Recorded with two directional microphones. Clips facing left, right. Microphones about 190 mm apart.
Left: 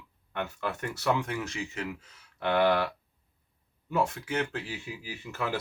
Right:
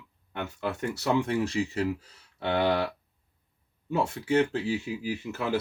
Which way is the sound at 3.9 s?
30° right (ahead or behind).